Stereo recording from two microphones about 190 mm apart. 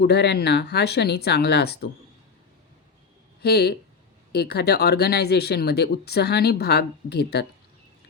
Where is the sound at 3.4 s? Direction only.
60° left (ahead or behind).